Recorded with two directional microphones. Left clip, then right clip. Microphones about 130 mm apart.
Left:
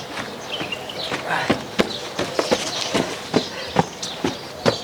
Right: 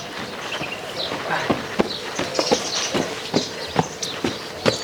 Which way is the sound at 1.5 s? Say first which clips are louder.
Left 1 dB; 40° left (ahead or behind).